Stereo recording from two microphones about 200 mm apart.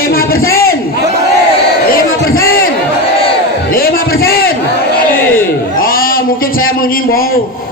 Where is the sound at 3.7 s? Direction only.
45° left (ahead or behind).